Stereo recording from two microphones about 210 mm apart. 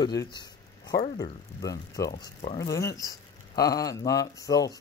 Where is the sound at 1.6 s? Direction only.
15° left (ahead or behind).